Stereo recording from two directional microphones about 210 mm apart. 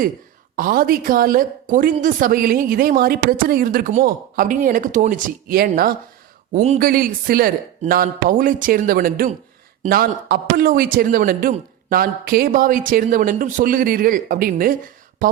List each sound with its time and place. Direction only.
0.5 s a woman's voice: 45° right (ahead or behind)